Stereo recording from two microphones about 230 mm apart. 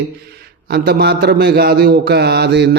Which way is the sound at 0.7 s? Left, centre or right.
Right.